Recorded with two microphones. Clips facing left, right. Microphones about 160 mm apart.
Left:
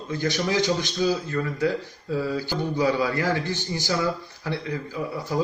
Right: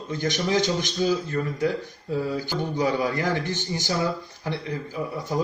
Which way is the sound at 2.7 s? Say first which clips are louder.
Left 1 dB; 20° right (ahead or behind).